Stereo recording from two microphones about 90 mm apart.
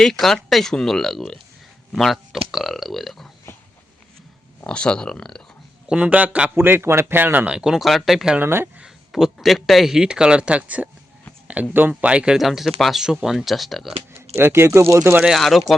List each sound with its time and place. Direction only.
0.0 s speech: 5° left (ahead or behind)
4.6 s speech: 10° left (ahead or behind)
5.9 s speech: 15° right (ahead or behind)
7.5 s speech: 5° right (ahead or behind)
8.4 s speech: 25° right (ahead or behind)
8.8 s speech: 5° right (ahead or behind)
14.1 s speech: 25° right (ahead or behind)
15.2 s speech: centre (ahead or behind)